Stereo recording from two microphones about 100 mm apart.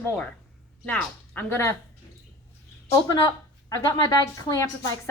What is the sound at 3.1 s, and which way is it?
Speech, 45° left (ahead or behind).